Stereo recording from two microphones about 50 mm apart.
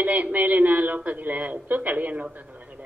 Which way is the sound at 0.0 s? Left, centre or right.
Right.